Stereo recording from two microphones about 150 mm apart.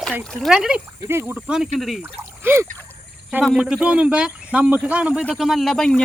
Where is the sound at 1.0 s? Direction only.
15° right (ahead or behind); by 2.0 s centre (ahead or behind).